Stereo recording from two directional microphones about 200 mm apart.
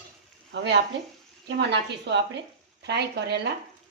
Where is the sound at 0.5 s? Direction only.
60° right (ahead or behind).